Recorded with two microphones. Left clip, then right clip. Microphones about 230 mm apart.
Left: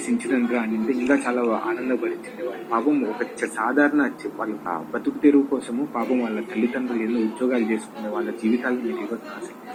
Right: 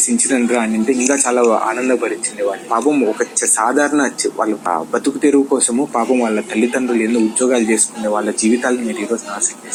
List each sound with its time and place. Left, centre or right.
0.3 s speech: right